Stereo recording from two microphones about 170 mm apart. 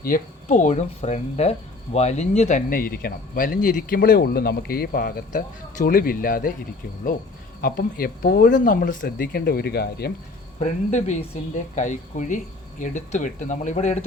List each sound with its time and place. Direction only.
0.4 s speech: 45° left (ahead or behind)
7.6 s speech: 60° left (ahead or behind)
10.6 s speech: 45° left (ahead or behind)